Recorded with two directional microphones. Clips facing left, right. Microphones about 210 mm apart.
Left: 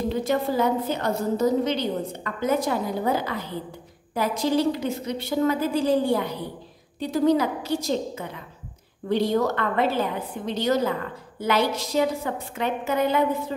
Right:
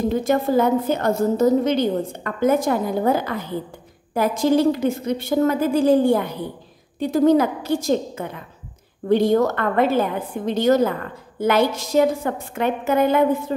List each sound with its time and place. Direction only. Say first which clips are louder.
0.1 s a woman's voice: right 6 dB; 50° right (ahead or behind)